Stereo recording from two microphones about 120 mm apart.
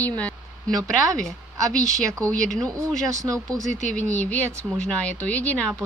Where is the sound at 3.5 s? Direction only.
5° left (ahead or behind).